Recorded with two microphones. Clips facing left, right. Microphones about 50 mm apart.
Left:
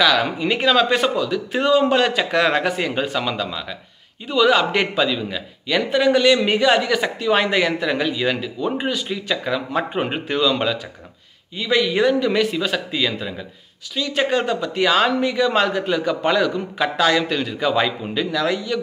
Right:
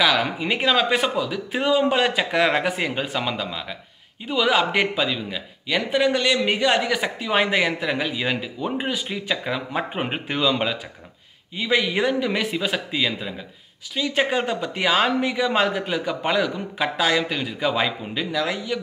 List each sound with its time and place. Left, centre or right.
0.0 s a man's voice: centre